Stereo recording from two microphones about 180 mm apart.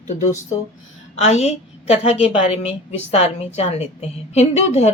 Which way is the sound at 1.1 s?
35° left (ahead or behind).